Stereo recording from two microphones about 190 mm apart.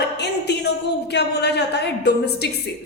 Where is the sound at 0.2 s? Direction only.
60° left (ahead or behind).